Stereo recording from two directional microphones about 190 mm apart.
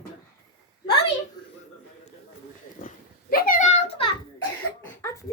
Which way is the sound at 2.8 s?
50° left (ahead or behind).